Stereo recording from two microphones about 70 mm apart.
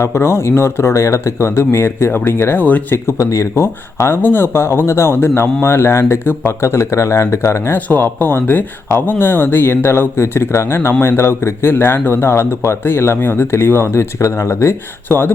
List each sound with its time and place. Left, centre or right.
0.0 s speech: left
2.9 s speech: left
7.8 s speech: left